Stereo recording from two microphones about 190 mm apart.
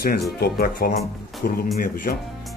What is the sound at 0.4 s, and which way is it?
Speech, 50° left (ahead or behind).